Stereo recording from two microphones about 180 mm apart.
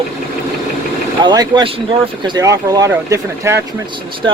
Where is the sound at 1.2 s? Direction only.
25° right (ahead or behind).